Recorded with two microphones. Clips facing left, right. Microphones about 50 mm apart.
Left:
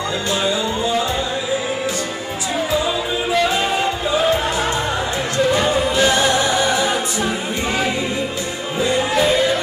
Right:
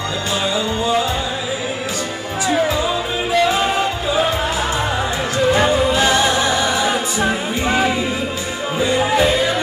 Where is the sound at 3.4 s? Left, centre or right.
Centre.